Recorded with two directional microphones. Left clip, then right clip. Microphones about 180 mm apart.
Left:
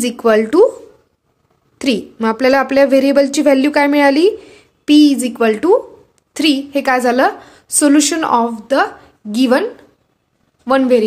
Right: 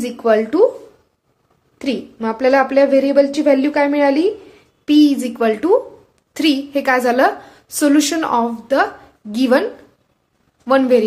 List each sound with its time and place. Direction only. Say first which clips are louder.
0.0 s a woman's voice: left 2 dB; 50° left (ahead or behind)
1.8 s a woman's voice: left 5 dB; 50° left (ahead or behind); by 11.1 s 30° left (ahead or behind)